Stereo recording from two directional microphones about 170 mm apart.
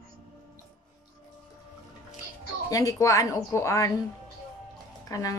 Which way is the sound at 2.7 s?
20° left (ahead or behind).